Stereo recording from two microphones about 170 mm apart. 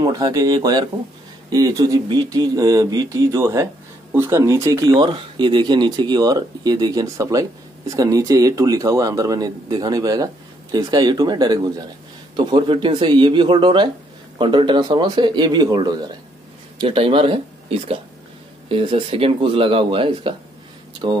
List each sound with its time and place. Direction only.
0.0 s speech: 20° right (ahead or behind)